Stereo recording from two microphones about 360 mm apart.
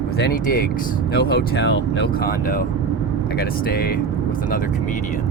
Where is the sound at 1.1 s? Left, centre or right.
Left.